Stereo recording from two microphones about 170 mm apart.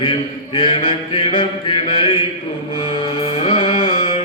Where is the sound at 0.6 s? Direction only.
30° left (ahead or behind).